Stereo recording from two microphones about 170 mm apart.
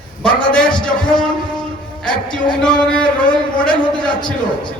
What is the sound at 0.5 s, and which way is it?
A man's voice, 5° left (ahead or behind).